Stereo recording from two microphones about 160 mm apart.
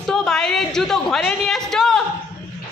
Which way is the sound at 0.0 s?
Centre (ahead or behind).